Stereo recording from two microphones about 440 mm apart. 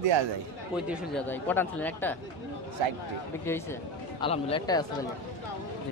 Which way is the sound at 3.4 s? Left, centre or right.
Centre.